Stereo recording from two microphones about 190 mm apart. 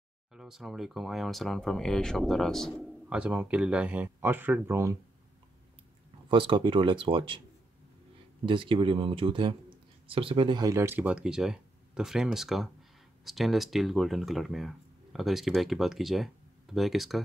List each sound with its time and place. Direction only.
0.3 s speech: centre (ahead or behind)
6.2 s speech: 25° right (ahead or behind)
8.5 s speech: 25° right (ahead or behind); by 17.2 s centre (ahead or behind)